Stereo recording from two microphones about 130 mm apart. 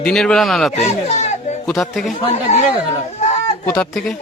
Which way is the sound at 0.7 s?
55° left (ahead or behind).